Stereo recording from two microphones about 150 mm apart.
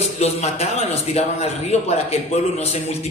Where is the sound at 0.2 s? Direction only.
45° left (ahead or behind).